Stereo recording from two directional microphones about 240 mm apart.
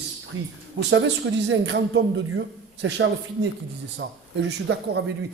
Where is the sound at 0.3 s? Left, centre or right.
Right.